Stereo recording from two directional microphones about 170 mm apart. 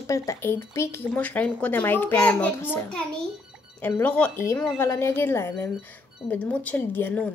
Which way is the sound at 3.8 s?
10° left (ahead or behind).